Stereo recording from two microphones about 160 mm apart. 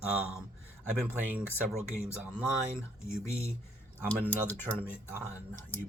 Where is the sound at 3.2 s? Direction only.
15° left (ahead or behind).